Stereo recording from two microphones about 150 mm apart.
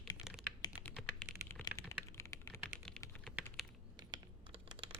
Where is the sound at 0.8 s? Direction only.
10° left (ahead or behind).